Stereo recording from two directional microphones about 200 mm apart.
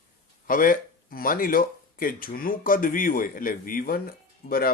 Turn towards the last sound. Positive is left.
turn(degrees=45)  # may be behind; listen again after turning